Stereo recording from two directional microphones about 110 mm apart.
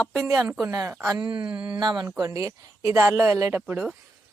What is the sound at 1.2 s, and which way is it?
Speech, 45° right (ahead or behind).